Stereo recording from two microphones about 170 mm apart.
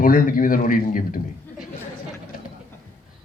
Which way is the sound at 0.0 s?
55° left (ahead or behind).